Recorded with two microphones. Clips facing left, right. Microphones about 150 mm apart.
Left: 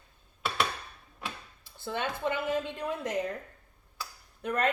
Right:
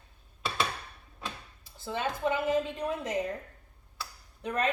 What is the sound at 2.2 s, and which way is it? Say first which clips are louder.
Speech: right 4 dB; 15° right (ahead or behind).